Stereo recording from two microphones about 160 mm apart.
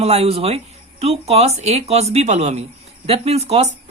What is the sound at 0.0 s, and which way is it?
Speech, 40° right (ahead or behind).